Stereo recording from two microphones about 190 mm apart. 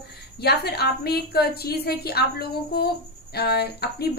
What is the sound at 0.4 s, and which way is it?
A woman's voice, 55° left (ahead or behind).